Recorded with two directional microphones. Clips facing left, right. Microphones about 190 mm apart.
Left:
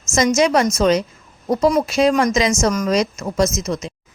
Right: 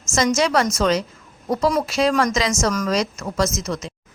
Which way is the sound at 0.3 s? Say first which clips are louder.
Left 3 dB; 20° left (ahead or behind).